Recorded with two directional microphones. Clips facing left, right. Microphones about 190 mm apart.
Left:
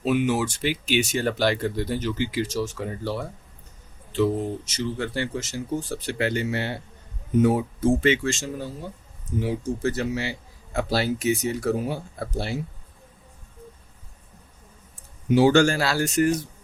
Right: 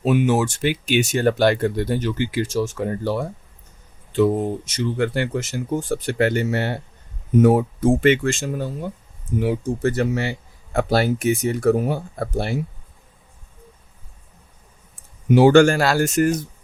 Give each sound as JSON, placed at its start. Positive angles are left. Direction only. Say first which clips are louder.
{"t": 0.3, "sound": "speech", "louder": "right 4 dB", "side_deg": -50}
{"t": 15.3, "sound": "speech", "louder": "right 5 dB", "side_deg": -55}